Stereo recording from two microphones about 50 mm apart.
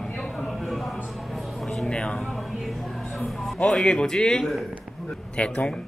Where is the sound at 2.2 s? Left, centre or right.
Centre.